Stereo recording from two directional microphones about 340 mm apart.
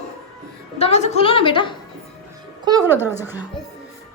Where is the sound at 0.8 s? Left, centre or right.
Centre.